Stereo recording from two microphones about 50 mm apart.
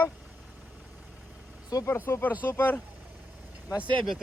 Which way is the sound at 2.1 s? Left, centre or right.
Left.